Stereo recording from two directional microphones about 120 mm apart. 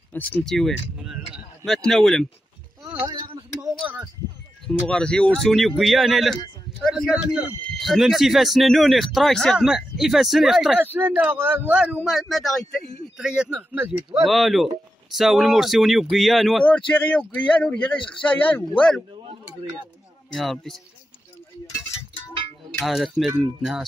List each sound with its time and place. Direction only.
0.1 s speech: 15° left (ahead or behind)
0.5 s speech: centre (ahead or behind)
2.8 s a sound: 35° right (ahead or behind)
4.6 s speech: 5° left (ahead or behind)
10.8 s speech: 15° right (ahead or behind)
13.7 s speech: 15° right (ahead or behind)
14.2 s speech: centre (ahead or behind)
16.6 s speech: 10° left (ahead or behind)
20.3 s speech: centre (ahead or behind)
22.8 s speech: centre (ahead or behind)